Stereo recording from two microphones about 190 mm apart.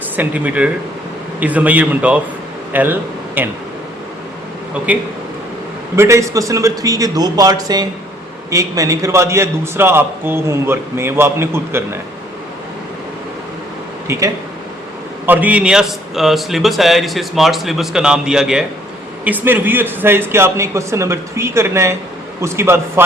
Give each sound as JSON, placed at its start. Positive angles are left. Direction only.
{"t": 0.2, "sound": "a man's voice", "side_deg": -10}
{"t": 6.0, "sound": "a man's voice", "side_deg": -15}
{"t": 15.3, "sound": "a man's voice", "side_deg": -5}